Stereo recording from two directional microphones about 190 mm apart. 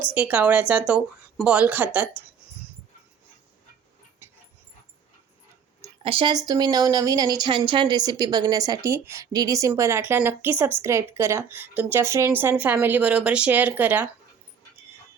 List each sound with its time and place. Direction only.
0.1 s a woman's voice: 5° right (ahead or behind)
6.0 s a woman's voice: 25° right (ahead or behind); by 14.1 s 10° right (ahead or behind)